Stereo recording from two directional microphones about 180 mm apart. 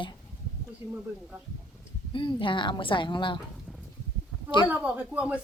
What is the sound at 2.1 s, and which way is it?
A woman's voice, 30° left (ahead or behind).